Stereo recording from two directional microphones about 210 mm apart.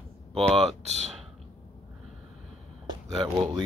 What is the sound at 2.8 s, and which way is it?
Speech, 20° right (ahead or behind).